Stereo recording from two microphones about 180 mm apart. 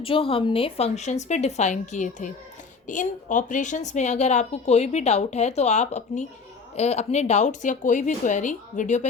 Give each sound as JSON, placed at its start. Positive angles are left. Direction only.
{"t": 0.0, "sound": "a woman's voice", "side_deg": 30}